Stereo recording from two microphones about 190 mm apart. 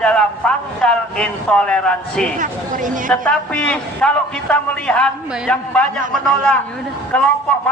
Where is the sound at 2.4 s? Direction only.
45° right (ahead or behind).